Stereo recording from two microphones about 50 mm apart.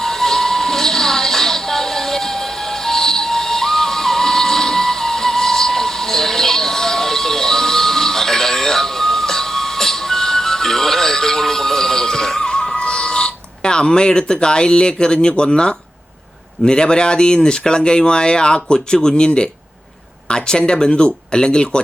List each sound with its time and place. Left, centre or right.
0.0 s a sound: centre
2.8 s music: centre
16.6 s speech: centre